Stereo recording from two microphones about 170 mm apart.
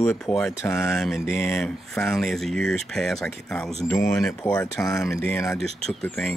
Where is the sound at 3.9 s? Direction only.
20° left (ahead or behind).